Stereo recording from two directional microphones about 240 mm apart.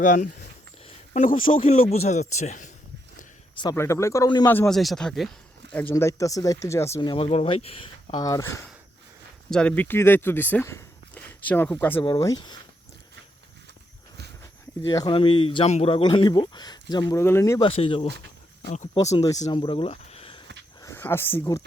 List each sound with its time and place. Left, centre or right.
0.0 s speech: left
3.6 s speech: centre
14.8 s speech: centre
17.7 s speech: left
19.4 s speech: left
20.8 s speech: centre